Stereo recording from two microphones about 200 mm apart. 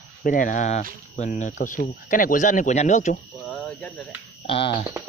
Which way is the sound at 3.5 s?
5° left (ahead or behind).